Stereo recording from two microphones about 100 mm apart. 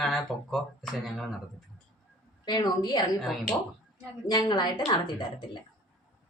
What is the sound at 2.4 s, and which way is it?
Speech, 45° left (ahead or behind).